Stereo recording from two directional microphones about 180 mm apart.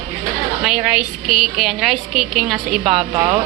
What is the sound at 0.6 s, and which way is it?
A woman's voice, 5° right (ahead or behind).